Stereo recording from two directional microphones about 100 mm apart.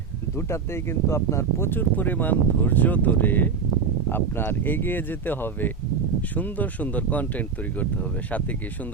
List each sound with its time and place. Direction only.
0.3 s speech: 25° left (ahead or behind)